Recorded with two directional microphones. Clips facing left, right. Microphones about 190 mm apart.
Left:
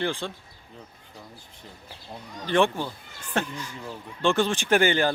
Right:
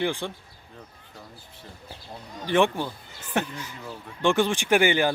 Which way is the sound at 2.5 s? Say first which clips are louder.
Right 1 dB; 15° right (ahead or behind).